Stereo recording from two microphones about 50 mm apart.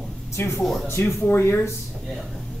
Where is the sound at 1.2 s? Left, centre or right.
Left.